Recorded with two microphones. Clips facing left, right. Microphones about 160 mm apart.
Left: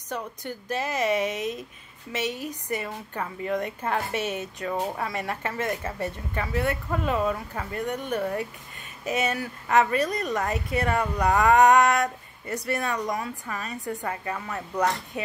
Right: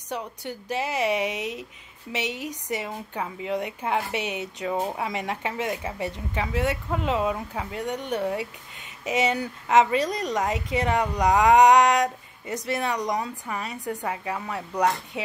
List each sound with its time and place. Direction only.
0.1 s speech: 15° right (ahead or behind)